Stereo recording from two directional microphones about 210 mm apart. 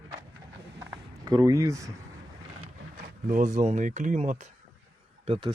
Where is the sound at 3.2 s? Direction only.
35° right (ahead or behind).